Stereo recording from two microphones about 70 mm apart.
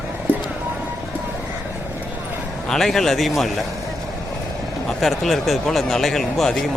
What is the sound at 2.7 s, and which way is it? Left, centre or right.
Speech, centre.